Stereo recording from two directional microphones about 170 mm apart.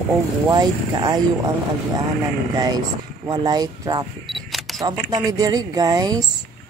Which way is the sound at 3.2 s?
25° right (ahead or behind).